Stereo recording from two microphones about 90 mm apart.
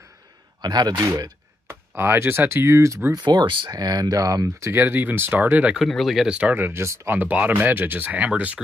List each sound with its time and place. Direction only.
0.6 s speech: 50° right (ahead or behind)
1.7 s speech: 25° right (ahead or behind)
3.3 s speech: 60° right (ahead or behind); by 5.8 s 15° right (ahead or behind)
5.8 s speech: centre (ahead or behind); by 7.2 s 30° right (ahead or behind)
7.2 s speech: 15° right (ahead or behind)